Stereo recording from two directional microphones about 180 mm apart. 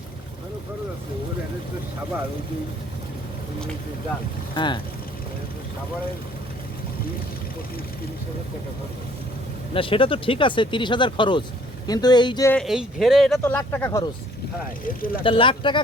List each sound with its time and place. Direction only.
4.5 s speech: 25° left (ahead or behind)
9.7 s speech: 30° left (ahead or behind)
12.6 s speech: centre (ahead or behind)
13.4 s speech: 15° left (ahead or behind)
14.8 s speech: 55° left (ahead or behind)
15.2 s speech: 30° left (ahead or behind)